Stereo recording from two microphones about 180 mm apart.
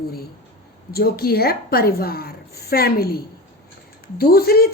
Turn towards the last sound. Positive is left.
turn(degrees=60)  # may be behind; listen again after turning